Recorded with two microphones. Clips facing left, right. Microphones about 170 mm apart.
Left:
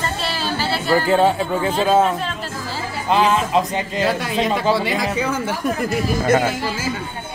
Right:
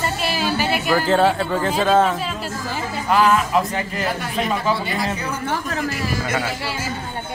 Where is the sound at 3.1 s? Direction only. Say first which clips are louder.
Even; 25° left (ahead or behind).